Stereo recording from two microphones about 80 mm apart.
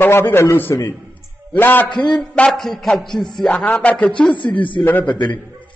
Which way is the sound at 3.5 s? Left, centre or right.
Centre.